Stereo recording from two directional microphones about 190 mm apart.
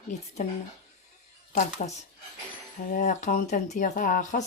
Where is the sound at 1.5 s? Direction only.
40° left (ahead or behind).